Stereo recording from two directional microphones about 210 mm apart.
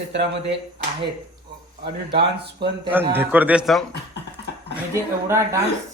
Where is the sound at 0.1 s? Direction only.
55° right (ahead or behind).